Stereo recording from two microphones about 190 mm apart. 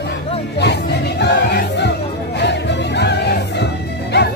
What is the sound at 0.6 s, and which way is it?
Music, 65° left (ahead or behind).